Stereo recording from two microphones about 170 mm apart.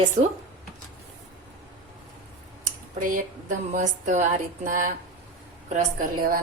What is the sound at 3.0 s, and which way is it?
A woman's voice, 55° right (ahead or behind).